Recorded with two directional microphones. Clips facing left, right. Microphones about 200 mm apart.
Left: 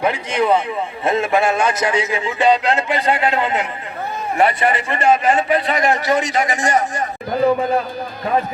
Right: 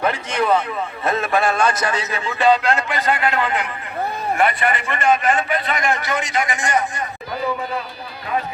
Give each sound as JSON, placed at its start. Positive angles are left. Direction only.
{"t": 0.0, "sound": "a man's voice", "side_deg": 15}